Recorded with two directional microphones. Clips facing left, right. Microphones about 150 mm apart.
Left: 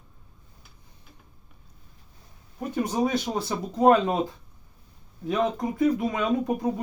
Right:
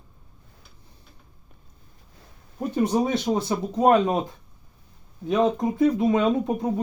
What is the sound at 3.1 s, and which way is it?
Speech, 20° right (ahead or behind).